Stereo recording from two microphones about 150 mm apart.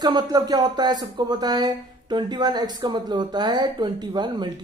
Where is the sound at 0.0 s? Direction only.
30° right (ahead or behind).